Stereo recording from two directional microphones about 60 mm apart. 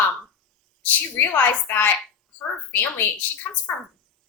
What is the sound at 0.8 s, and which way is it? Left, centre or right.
A woman's voice, left.